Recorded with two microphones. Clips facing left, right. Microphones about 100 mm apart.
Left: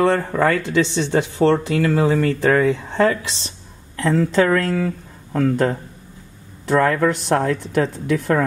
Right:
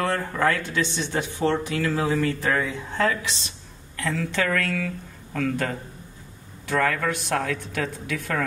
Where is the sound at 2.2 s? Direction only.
70° left (ahead or behind).